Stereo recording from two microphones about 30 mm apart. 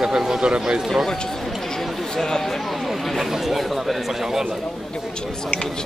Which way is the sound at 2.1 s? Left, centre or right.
Centre.